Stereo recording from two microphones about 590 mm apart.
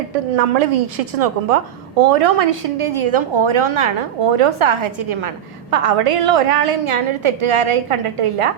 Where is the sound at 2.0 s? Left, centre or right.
Right.